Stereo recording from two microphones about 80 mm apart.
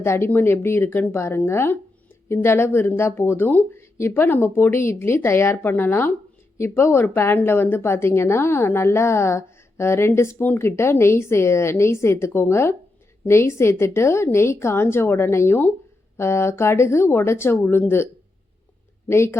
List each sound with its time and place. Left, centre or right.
0.0 s a woman's voice: left
3.8 s a woman's voice: left